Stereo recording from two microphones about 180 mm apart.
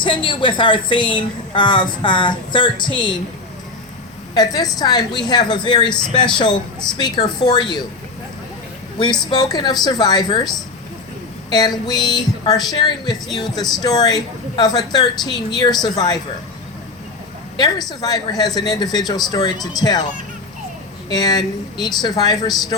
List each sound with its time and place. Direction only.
0.0 s a woman's voice: 25° left (ahead or behind)
4.4 s a woman's voice: 20° left (ahead or behind)
9.0 s a woman's voice: 25° left (ahead or behind)
11.5 s a woman's voice: 20° left (ahead or behind)
17.6 s a woman's voice: 20° left (ahead or behind)
21.1 s a woman's voice: 20° left (ahead or behind)